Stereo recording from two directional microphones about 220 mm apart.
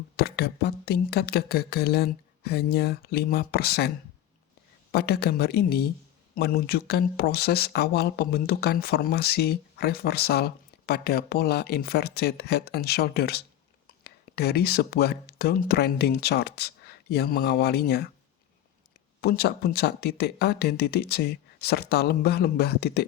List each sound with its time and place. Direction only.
0.2 s speech: 45° left (ahead or behind)
19.2 s speech: 45° left (ahead or behind)